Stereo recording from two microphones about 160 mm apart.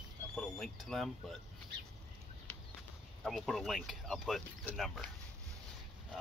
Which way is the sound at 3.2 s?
Centre (ahead or behind).